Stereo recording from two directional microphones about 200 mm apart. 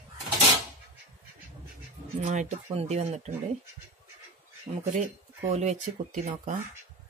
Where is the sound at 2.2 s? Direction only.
35° right (ahead or behind).